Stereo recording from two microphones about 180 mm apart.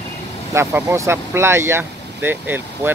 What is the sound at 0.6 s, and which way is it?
Speech, 15° right (ahead or behind).